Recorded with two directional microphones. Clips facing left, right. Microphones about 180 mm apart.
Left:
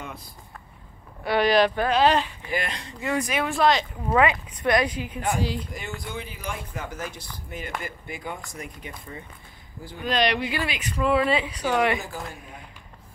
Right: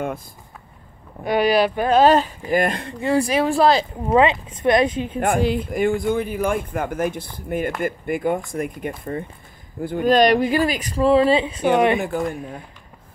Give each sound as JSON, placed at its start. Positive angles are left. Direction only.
{"t": 1.2, "sound": "speech", "side_deg": -10}
{"t": 1.9, "sound": "speech", "side_deg": -45}
{"t": 3.0, "sound": "speech", "side_deg": -30}
{"t": 5.2, "sound": "speech", "side_deg": -55}